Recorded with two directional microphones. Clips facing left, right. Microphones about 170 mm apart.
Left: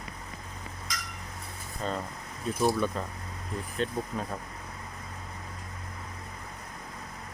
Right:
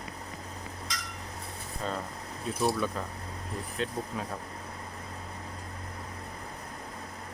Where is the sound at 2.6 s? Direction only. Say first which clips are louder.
Left 2 dB; centre (ahead or behind).